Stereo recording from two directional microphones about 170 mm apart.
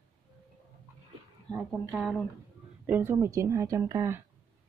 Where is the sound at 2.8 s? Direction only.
10° right (ahead or behind).